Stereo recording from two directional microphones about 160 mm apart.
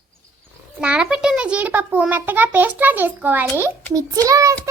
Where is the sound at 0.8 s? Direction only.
5° right (ahead or behind).